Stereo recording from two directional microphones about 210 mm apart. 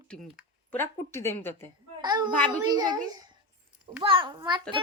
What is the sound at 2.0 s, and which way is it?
A child's voice, 20° right (ahead or behind).